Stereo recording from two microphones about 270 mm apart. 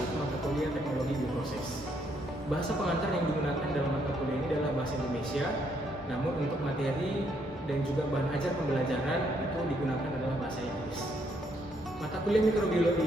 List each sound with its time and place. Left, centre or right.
0.4 s music: centre
12.3 s speech: centre